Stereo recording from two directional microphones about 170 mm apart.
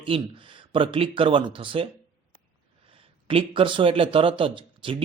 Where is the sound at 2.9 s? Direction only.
35° right (ahead or behind).